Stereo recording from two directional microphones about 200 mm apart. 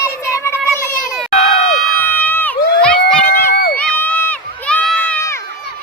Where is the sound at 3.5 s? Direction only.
50° left (ahead or behind).